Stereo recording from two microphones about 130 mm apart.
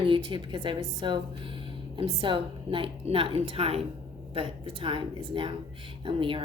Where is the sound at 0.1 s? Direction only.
35° right (ahead or behind).